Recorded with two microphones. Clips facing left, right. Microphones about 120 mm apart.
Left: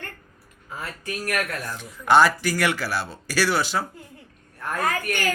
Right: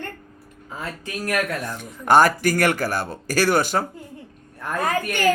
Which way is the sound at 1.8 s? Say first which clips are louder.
Right 2 dB; 45° right (ahead or behind).